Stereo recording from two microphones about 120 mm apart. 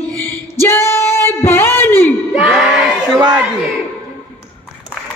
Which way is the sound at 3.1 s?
35° right (ahead or behind).